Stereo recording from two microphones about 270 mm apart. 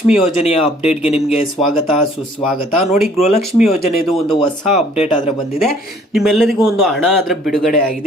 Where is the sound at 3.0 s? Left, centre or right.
Centre.